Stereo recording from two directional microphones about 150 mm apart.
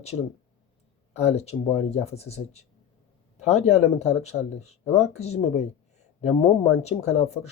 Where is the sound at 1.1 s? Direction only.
45° left (ahead or behind).